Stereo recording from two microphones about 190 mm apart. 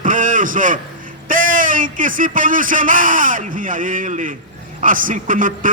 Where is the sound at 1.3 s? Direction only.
45° right (ahead or behind).